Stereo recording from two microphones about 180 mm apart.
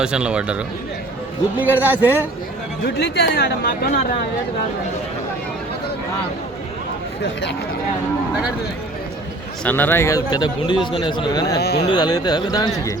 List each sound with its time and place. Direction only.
0.0 s a man's voice: 5° right (ahead or behind)
2.8 s speech: 65° left (ahead or behind)
9.6 s a man's voice: 10° left (ahead or behind)
11.5 s speech: 65° left (ahead or behind)
11.9 s a man's voice: 25° left (ahead or behind)